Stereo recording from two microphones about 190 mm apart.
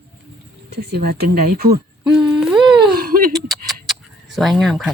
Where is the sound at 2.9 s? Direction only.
50° right (ahead or behind).